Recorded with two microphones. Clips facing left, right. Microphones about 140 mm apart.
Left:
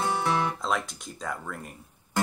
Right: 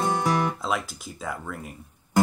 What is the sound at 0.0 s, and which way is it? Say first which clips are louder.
Guitar: right 3 dB; 15° right (ahead or behind).